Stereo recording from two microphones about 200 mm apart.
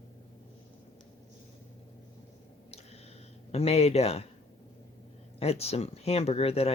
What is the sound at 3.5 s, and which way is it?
Speech, 30° left (ahead or behind).